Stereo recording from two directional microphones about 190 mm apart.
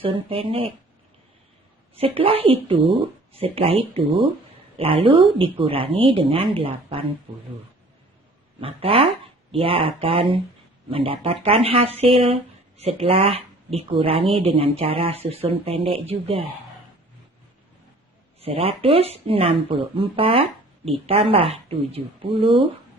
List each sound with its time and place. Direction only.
0.0 s speech: 30° right (ahead or behind)
2.0 s speech: 30° right (ahead or behind)
8.6 s speech: 30° right (ahead or behind)
18.3 s speech: 30° right (ahead or behind)